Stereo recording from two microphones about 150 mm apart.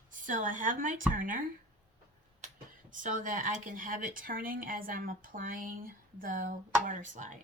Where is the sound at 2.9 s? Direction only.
60° right (ahead or behind).